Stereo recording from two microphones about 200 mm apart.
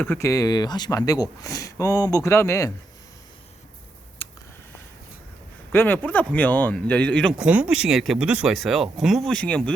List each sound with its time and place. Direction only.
0.0 s speech: 15° left (ahead or behind)
4.2 s a sound: 25° left (ahead or behind)
5.7 s speech: 10° left (ahead or behind)
7.4 s speech: 5° right (ahead or behind)